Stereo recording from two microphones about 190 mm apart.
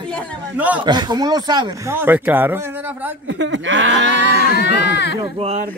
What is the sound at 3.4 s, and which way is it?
Speech, 75° right (ahead or behind).